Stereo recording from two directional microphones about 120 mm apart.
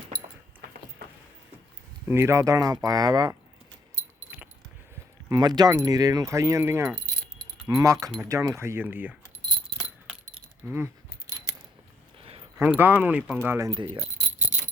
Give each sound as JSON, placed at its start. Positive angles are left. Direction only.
{"t": 2.0, "sound": "speech", "side_deg": -20}
{"t": 4.3, "sound": "keys jangling", "side_deg": -15}
{"t": 5.3, "sound": "speech", "side_deg": -35}
{"t": 10.7, "sound": "keys jangling", "side_deg": -20}
{"t": 12.5, "sound": "speech", "side_deg": -15}
{"t": 13.7, "sound": "speech", "side_deg": -45}
{"t": 14.5, "sound": "a sound", "side_deg": -65}